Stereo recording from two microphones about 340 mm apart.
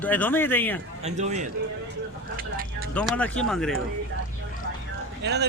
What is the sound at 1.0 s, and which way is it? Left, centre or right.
Speech, centre.